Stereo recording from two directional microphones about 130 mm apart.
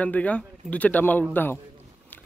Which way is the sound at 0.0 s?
10° left (ahead or behind).